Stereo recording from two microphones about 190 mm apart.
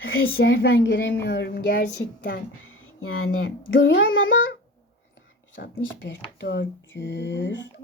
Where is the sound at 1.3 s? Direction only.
60° left (ahead or behind).